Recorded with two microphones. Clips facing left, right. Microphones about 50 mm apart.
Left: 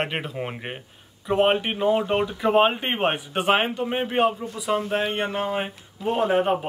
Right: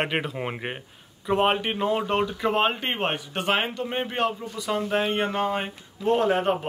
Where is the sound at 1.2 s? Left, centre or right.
Centre.